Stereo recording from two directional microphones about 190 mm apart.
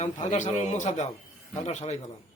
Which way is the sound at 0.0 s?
40° left (ahead or behind).